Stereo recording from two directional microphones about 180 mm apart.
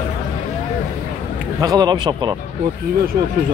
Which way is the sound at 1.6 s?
20° right (ahead or behind).